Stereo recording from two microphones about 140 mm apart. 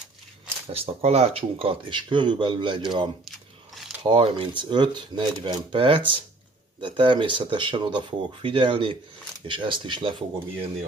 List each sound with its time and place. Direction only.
0.7 s speech: 45° right (ahead or behind)
3.3 s biting: centre (ahead or behind)
4.0 s speech: 35° right (ahead or behind)